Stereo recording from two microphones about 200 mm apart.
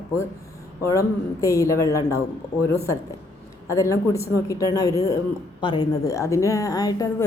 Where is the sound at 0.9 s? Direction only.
15° left (ahead or behind).